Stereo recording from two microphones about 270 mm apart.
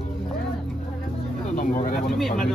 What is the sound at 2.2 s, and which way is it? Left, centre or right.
Speech, centre.